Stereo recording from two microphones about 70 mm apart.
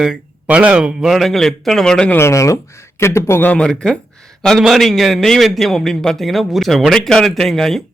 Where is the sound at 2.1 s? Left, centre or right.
Left.